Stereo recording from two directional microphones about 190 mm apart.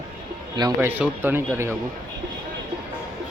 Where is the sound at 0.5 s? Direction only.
20° right (ahead or behind).